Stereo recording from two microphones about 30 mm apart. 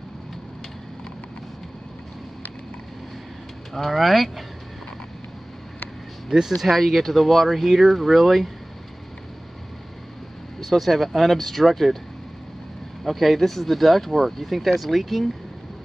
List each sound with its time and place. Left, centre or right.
3.7 s speech: centre
6.3 s speech: centre
6.8 s speech: centre
10.6 s speech: centre
13.0 s speech: centre